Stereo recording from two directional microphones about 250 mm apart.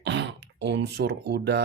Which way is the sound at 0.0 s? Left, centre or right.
Right.